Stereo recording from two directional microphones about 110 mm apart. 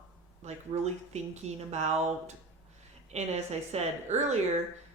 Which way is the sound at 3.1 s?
75° right (ahead or behind).